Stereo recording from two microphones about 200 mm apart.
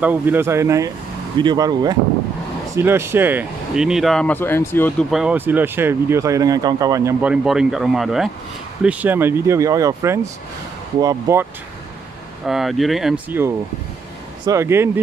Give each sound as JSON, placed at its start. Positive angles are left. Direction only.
{"t": 0.0, "sound": "speech", "side_deg": -10}
{"t": 5.1, "sound": "speech", "side_deg": -5}
{"t": 12.4, "sound": "speech", "side_deg": 0}